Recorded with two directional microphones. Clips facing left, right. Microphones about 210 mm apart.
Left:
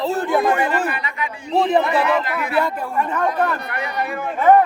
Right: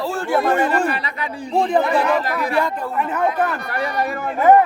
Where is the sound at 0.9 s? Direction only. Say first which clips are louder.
Right 1 dB; 35° right (ahead or behind).